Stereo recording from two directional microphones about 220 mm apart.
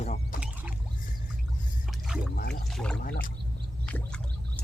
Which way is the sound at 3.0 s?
40° left (ahead or behind).